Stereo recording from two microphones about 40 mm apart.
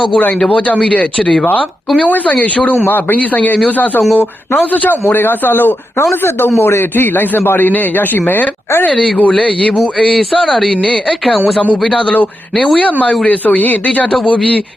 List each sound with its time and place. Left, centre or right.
0.4 s speech: left
2.0 s speech: left
2.8 s speech: left
4.7 s a man's voice: left
6.6 s a man's voice: left
7.7 s speech: left
9.8 s speech: centre
12.0 s speech: left